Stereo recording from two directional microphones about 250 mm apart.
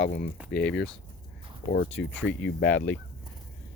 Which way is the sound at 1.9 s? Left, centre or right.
Centre.